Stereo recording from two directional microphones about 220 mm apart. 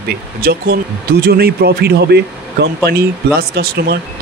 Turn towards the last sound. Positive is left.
turn(degrees=-45)  # may be behind; listen again after turning